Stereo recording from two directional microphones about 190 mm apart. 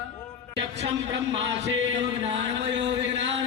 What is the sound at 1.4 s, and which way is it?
Music, 70° right (ahead or behind).